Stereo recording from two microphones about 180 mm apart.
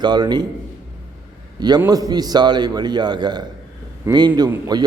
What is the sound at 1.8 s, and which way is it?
A man's voice, 20° right (ahead or behind).